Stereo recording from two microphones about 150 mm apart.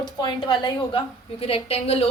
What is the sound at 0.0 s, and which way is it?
A woman's voice, 30° left (ahead or behind).